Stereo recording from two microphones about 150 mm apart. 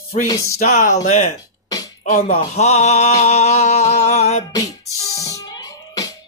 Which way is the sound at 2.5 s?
50° left (ahead or behind).